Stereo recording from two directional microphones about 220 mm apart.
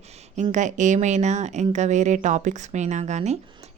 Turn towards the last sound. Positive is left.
turn(degrees=-30)  # may be behind; listen again after turning